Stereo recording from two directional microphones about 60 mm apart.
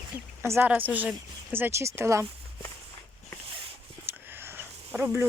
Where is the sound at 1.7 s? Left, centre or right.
Right.